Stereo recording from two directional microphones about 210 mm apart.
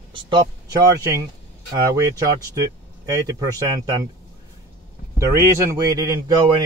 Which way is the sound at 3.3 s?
20° right (ahead or behind).